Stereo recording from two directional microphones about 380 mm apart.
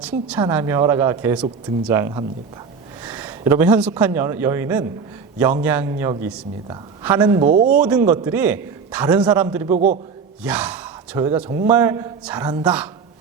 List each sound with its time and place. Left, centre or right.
0.3 s a man's voice: centre
7.5 s speech: right
7.8 s a man's voice: centre
9.7 s speech: centre
10.4 s speech: centre